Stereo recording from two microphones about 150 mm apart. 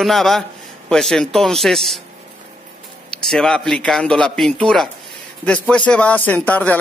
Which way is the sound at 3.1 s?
5° left (ahead or behind).